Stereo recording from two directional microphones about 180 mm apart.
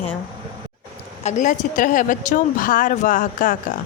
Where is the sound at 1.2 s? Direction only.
45° left (ahead or behind).